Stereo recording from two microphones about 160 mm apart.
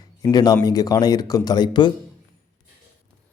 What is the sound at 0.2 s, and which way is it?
Speech, 25° left (ahead or behind).